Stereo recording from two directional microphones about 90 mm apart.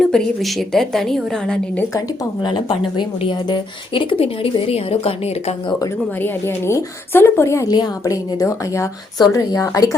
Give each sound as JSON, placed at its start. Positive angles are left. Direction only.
{"t": 0.0, "sound": "a woman's voice", "side_deg": 5}
{"t": 2.4, "sound": "speech", "side_deg": 60}
{"t": 6.1, "sound": "a woman's voice", "side_deg": 25}
{"t": 7.7, "sound": "a woman's voice", "side_deg": 45}
{"t": 9.1, "sound": "speech", "side_deg": 45}